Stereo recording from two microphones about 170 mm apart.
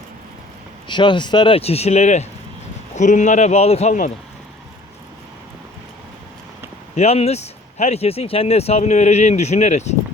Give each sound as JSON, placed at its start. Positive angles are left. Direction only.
{"t": 0.9, "sound": "a man's voice", "side_deg": 25}
{"t": 6.9, "sound": "speech", "side_deg": 40}